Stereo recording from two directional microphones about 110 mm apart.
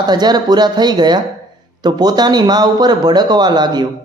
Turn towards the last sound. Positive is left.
turn(degrees=-40)  # may be behind; listen again after turning